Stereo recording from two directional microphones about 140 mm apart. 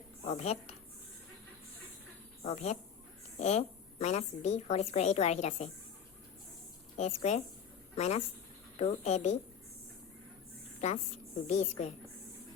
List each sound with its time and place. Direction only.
0.3 s a woman's voice: 50° left (ahead or behind)
2.4 s a woman's voice: 50° left (ahead or behind)
6.9 s a woman's voice: 55° left (ahead or behind)
10.8 s a woman's voice: 55° left (ahead or behind)